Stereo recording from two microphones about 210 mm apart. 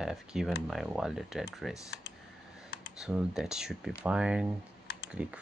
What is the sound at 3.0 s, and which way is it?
Speech, 5° right (ahead or behind).